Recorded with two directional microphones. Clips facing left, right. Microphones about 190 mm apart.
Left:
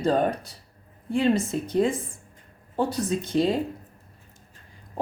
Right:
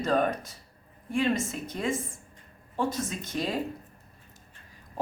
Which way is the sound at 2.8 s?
35° left (ahead or behind).